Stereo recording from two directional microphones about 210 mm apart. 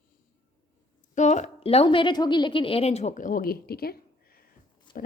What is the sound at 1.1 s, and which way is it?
A woman's voice, 35° left (ahead or behind).